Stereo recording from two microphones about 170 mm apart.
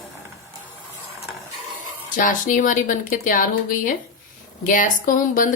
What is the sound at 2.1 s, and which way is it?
Speech, 55° left (ahead or behind).